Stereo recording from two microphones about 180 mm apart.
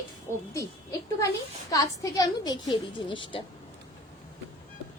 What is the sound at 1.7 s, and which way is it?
A woman's voice, 20° left (ahead or behind).